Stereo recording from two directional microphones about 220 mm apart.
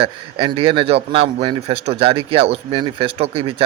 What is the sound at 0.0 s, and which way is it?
Speech, 25° right (ahead or behind).